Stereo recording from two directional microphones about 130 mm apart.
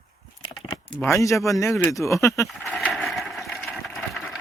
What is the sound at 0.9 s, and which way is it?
Speech, 20° left (ahead or behind).